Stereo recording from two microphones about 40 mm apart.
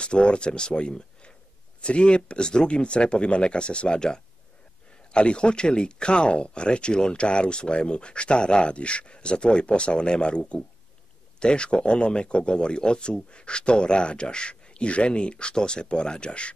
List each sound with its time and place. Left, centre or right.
0.0 s speech: left